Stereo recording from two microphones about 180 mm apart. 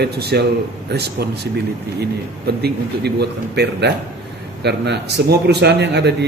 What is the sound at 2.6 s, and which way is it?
A man's voice, 65° right (ahead or behind).